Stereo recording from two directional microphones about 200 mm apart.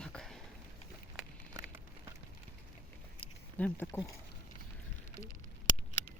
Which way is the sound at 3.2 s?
5° left (ahead or behind).